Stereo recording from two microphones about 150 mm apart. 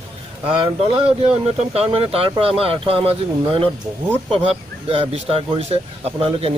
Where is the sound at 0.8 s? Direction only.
40° right (ahead or behind).